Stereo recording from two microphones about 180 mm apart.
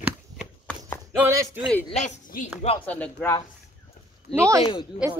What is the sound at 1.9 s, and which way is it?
Speech, 40° left (ahead or behind).